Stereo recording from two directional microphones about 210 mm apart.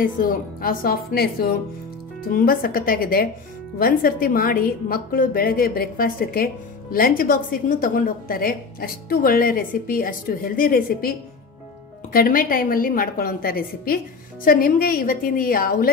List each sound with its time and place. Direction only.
0.0 s a woman's voice: 40° left (ahead or behind)